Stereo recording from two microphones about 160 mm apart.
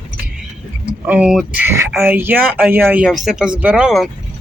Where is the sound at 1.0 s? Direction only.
5° right (ahead or behind).